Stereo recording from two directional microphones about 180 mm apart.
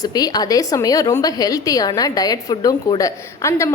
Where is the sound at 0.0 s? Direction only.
20° left (ahead or behind).